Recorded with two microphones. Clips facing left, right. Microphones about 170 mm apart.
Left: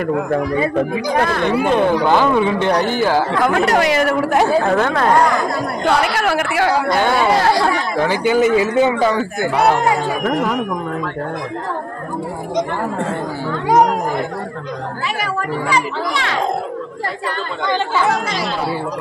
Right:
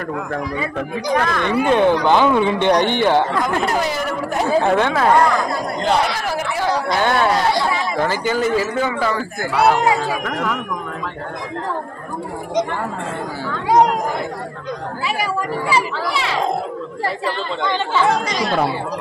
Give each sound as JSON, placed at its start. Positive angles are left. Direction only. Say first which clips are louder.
{"t": 1.2, "sound": "speech", "louder": "left 3 dB", "side_deg": 35}
{"t": 1.7, "sound": "speech", "louder": "right 1 dB", "side_deg": 0}
{"t": 3.4, "sound": "speech", "louder": "left 5 dB", "side_deg": 75}
{"t": 4.5, "sound": "speech", "louder": "left 1 dB", "side_deg": 0}
{"t": 6.1, "sound": "speech", "louder": "left 5 dB", "side_deg": 75}
{"t": 6.9, "sound": "speech", "louder": "left 2 dB", "side_deg": 0}
{"t": 8.0, "sound": "a man's voice", "louder": "left 6 dB", "side_deg": 10}
{"t": 15.7, "sound": "speech", "louder": "even", "side_deg": -5}